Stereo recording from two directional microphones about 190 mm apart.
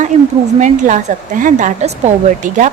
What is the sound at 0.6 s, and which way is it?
A woman's voice, 40° right (ahead or behind).